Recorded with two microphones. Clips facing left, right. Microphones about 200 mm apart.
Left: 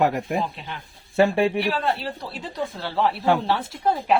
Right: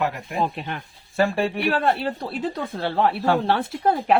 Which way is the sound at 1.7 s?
55° right (ahead or behind).